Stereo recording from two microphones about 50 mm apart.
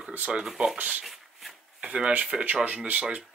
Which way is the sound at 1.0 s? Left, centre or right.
Centre.